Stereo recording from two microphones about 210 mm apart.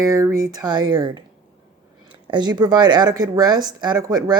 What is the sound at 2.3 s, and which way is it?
Speech, 20° right (ahead or behind).